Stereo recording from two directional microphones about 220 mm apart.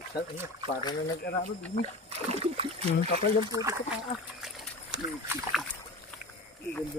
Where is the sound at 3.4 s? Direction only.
15° right (ahead or behind).